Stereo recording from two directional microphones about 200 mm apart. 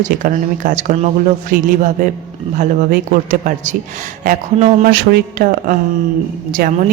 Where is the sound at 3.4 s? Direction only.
40° right (ahead or behind).